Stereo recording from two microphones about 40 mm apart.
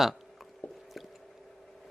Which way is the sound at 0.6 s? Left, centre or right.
Left.